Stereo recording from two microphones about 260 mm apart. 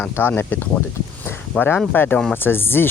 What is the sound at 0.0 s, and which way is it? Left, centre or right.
Speech, centre.